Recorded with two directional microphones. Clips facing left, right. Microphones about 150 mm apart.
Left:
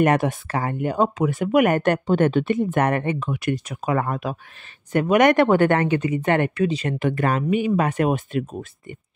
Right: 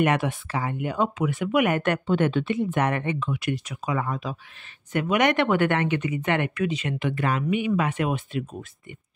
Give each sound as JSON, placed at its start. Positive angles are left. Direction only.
{"t": 0.0, "sound": "speech", "side_deg": 45}
{"t": 4.9, "sound": "speech", "side_deg": 45}